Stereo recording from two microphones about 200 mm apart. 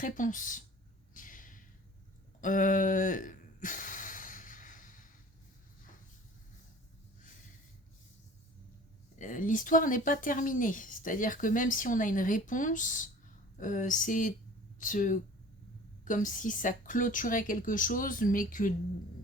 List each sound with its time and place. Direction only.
0.0 s speech: 40° left (ahead or behind)
1.1 s a sound: 40° left (ahead or behind)
9.1 s speech: 40° left (ahead or behind)